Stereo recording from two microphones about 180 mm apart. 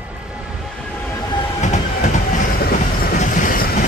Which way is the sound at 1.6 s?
45° left (ahead or behind).